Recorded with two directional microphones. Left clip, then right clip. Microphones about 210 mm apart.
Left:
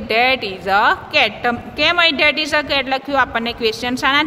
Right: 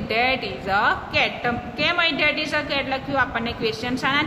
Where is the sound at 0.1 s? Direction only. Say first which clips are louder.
Left 6 dB; 50° left (ahead or behind).